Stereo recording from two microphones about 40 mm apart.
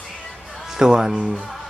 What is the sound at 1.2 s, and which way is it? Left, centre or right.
Speech, right.